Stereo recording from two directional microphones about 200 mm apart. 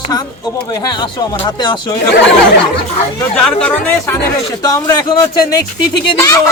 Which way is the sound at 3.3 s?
5° left (ahead or behind).